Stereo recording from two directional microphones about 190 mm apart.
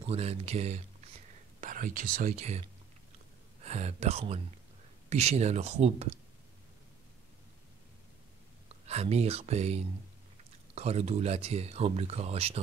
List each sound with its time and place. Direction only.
0.0 s speech: 30° right (ahead or behind)
1.6 s speech: 45° right (ahead or behind)
3.6 s speech: 35° right (ahead or behind)
8.8 s speech: 35° right (ahead or behind)